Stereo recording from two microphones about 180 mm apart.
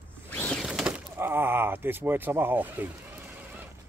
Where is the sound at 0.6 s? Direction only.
5° right (ahead or behind).